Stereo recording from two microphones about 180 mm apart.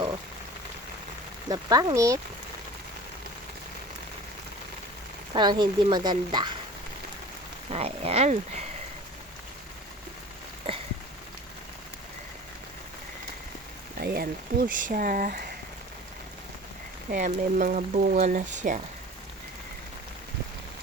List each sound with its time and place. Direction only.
1.5 s speech: 20° right (ahead or behind)
5.3 s speech: 25° right (ahead or behind)
7.7 s speech: 35° right (ahead or behind)
10.7 s a sound: 35° right (ahead or behind)
14.0 s speech: 60° right (ahead or behind)
17.1 s speech: 45° right (ahead or behind)